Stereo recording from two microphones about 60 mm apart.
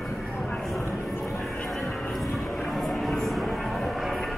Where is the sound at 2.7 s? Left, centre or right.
Centre.